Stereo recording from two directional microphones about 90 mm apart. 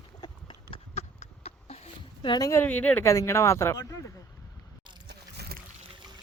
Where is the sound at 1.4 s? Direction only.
90° left.